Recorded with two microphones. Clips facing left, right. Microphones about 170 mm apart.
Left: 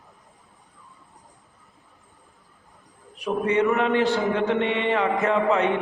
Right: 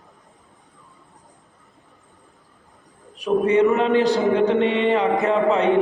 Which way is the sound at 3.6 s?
20° right (ahead or behind).